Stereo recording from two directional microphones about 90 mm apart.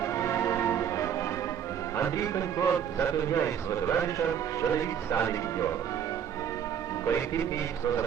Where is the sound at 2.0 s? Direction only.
35° left (ahead or behind).